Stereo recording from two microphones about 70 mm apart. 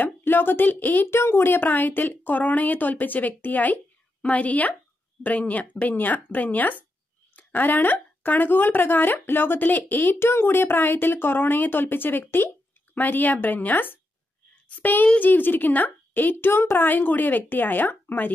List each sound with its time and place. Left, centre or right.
0.0 s a woman's voice: left